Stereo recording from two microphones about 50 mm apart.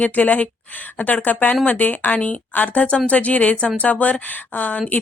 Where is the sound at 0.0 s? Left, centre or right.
Left.